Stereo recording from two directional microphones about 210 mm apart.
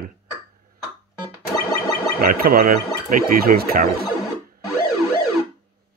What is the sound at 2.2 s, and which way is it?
Speech, 45° right (ahead or behind).